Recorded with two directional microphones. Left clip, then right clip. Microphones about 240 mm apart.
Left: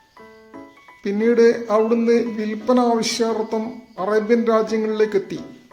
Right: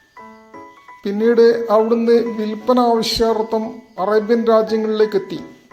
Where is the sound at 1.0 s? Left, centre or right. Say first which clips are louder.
Right 3 dB; centre.